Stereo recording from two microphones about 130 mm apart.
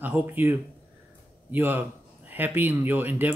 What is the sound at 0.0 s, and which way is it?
Speech, 15° right (ahead or behind).